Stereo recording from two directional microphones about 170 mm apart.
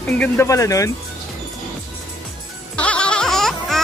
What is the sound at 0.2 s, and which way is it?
Speech, 15° left (ahead or behind).